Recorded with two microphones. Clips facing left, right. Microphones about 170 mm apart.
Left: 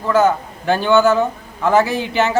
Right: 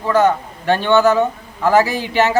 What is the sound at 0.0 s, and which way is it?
A man's voice, centre (ahead or behind).